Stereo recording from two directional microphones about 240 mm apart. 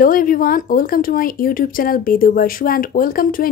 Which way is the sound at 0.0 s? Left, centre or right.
Left.